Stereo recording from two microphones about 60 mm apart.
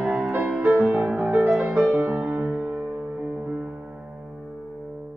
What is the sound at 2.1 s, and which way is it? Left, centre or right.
Music, centre.